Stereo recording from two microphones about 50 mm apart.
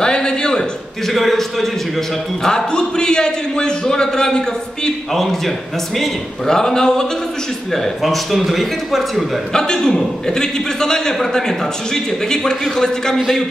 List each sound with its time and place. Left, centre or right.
0.0 s a sound: centre
1.0 s a man's voice: centre
2.4 s a man's voice: centre
5.1 s a man's voice: centre
9.5 s a man's voice: centre